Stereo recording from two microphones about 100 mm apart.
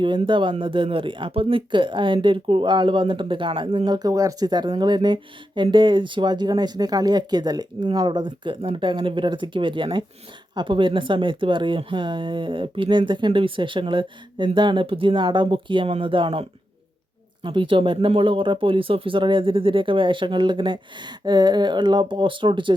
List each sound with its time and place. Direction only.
0.3 s speech: 55° right (ahead or behind)
3.8 s speech: 45° right (ahead or behind)